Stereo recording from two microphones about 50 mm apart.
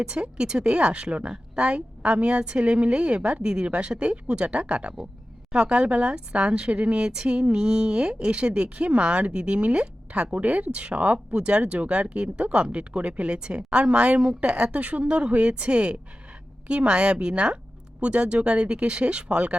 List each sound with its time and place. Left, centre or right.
0.0 s a woman's voice: centre